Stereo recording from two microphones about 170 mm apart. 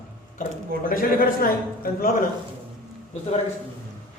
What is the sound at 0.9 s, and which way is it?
A man's voice, 55° left (ahead or behind).